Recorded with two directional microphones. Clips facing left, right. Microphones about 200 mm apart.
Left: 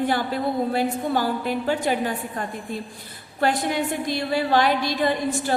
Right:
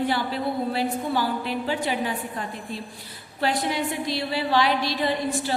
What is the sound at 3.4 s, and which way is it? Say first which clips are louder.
A woman's voice: left 2 dB; 50° left (ahead or behind).